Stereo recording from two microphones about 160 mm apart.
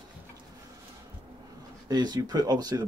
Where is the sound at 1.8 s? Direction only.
25° right (ahead or behind).